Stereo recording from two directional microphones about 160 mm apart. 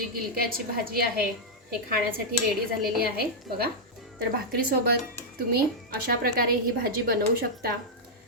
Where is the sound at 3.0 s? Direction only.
70° right (ahead or behind).